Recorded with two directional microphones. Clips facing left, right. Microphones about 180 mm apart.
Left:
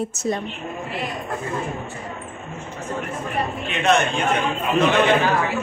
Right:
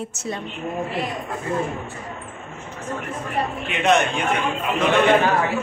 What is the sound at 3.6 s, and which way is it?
Speech, 15° right (ahead or behind).